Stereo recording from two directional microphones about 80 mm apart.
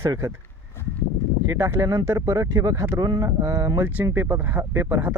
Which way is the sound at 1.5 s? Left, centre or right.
Right.